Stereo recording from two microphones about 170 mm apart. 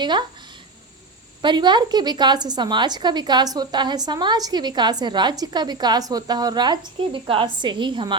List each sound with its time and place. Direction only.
0.0 s a woman's voice: 25° right (ahead or behind)
1.4 s a woman's voice: 25° right (ahead or behind)